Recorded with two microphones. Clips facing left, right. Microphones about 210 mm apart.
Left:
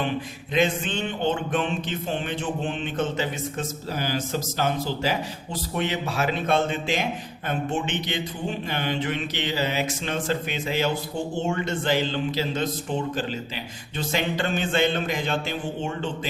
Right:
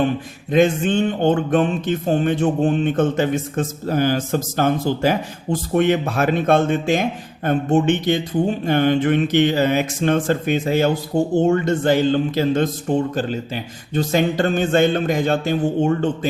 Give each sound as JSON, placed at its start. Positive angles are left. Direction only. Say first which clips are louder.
{"t": 0.5, "sound": "music", "louder": "right 8 dB", "side_deg": -45}